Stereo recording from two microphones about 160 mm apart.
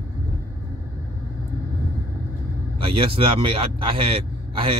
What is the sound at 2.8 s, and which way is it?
Speech, 35° right (ahead or behind).